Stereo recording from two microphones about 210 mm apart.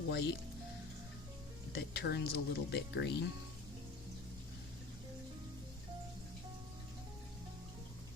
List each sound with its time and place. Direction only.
0.1 s speech: 55° left (ahead or behind)
1.7 s speech: 50° left (ahead or behind)